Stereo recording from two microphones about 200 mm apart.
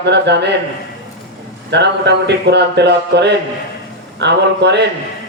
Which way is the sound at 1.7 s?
60° right (ahead or behind).